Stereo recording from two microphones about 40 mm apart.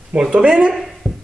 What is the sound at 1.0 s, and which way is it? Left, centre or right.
Beatboxing, centre.